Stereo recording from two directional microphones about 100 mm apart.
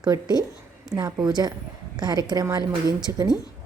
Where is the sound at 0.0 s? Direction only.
45° right (ahead or behind).